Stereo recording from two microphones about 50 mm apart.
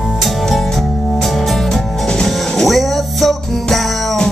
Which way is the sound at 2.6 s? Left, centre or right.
Centre.